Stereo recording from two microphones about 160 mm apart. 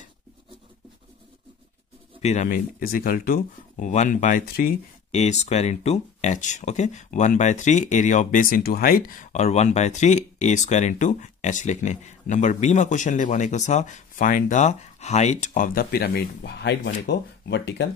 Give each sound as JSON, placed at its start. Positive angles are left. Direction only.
{"t": 2.2, "sound": "speech", "side_deg": 45}
{"t": 2.5, "sound": "speech", "side_deg": 65}
{"t": 5.1, "sound": "speech", "side_deg": 45}